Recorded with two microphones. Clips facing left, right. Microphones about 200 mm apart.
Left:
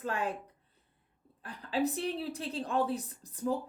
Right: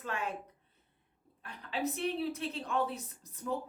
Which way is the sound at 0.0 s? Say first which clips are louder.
Left 4 dB; 35° left (ahead or behind).